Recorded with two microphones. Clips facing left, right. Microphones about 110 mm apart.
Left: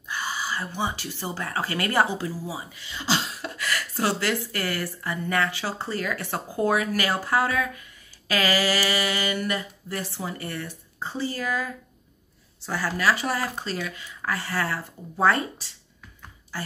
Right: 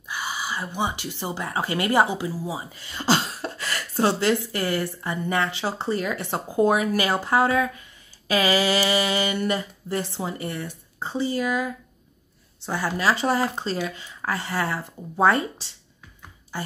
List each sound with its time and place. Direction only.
0.1 s speech: 15° right (ahead or behind)
2.7 s beatboxing: 45° right (ahead or behind)
3.4 s speech: 30° right (ahead or behind)